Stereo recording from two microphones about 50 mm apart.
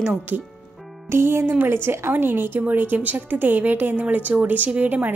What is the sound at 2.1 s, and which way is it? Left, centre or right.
A woman's voice, right.